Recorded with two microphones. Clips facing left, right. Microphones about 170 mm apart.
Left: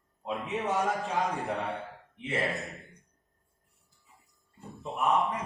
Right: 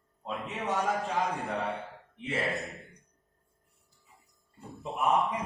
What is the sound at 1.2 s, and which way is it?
A man's voice, centre (ahead or behind).